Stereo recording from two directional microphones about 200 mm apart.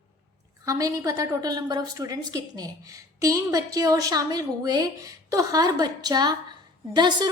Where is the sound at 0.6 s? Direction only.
15° right (ahead or behind).